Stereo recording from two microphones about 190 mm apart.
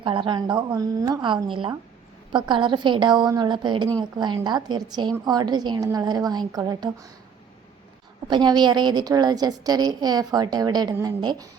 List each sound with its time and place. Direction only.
0.0 s a woman's voice: 25° right (ahead or behind)
8.3 s a woman's voice: 25° right (ahead or behind)